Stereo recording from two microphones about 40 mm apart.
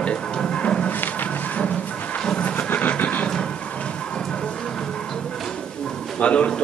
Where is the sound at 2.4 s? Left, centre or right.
Left.